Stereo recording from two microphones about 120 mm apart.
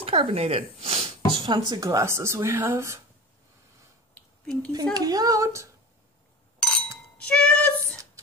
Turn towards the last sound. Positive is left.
turn(degrees=10)  # may be behind; listen again after turning